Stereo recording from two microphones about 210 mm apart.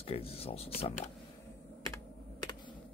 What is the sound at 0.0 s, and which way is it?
Speech, 30° left (ahead or behind).